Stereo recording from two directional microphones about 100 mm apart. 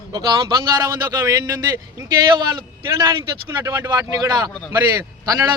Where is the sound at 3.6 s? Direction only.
40° right (ahead or behind).